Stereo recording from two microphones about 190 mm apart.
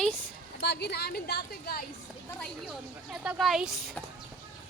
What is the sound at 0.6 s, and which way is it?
A woman's voice, 60° left (ahead or behind).